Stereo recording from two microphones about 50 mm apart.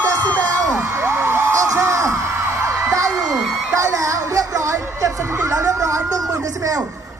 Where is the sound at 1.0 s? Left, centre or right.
Right.